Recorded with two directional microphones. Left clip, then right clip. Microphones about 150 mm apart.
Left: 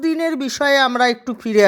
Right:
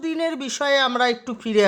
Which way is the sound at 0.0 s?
30° left (ahead or behind).